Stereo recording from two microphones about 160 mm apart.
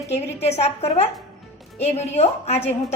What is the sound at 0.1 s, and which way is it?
A woman's voice, 40° left (ahead or behind).